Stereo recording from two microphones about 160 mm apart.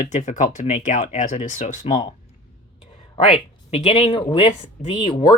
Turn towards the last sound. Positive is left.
turn(degrees=30)  # may be behind; listen again after turning